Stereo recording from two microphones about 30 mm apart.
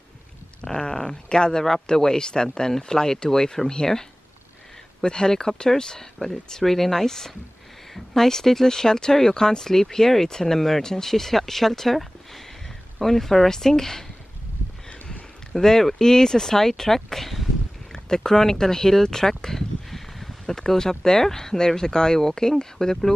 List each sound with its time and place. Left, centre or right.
0.7 s speech: left
5.0 s speech: left
6.6 s speech: centre
15.5 s speech: centre
17.9 s a sound: left
18.2 s speech: centre